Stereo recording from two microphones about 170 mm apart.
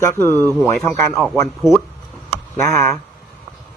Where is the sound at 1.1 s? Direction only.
Centre (ahead or behind).